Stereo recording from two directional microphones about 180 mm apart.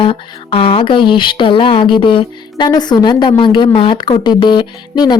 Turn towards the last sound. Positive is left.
turn(degrees=25)  # may be behind; listen again after turning